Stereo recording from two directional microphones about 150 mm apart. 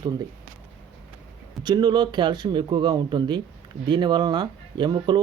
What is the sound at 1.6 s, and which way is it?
Speech, 30° right (ahead or behind).